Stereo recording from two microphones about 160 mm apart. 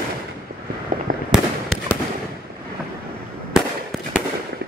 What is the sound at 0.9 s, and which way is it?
Fireworks, 55° right (ahead or behind).